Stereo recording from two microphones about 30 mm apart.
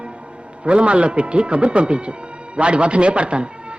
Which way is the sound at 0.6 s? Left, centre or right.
Right.